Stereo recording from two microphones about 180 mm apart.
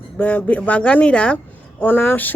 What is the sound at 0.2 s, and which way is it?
A woman's voice, 10° left (ahead or behind).